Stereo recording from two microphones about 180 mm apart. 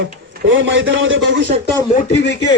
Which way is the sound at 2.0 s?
65° left (ahead or behind).